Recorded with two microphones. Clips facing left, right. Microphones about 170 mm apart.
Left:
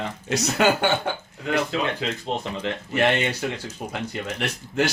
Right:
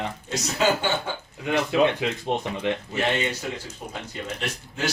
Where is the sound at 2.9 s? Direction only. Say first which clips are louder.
Left 3 dB; 65° left (ahead or behind).